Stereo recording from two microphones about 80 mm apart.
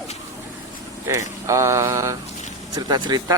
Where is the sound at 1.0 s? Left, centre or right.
Right.